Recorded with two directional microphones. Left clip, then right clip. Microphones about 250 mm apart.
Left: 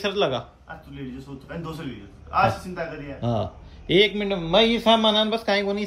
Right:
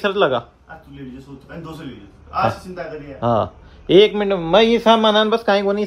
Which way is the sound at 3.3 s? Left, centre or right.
Centre.